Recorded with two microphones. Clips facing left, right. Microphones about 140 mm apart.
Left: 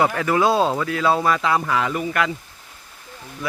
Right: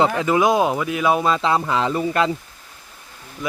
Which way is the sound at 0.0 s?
20° right (ahead or behind).